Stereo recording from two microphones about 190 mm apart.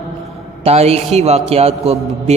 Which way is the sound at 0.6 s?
35° right (ahead or behind).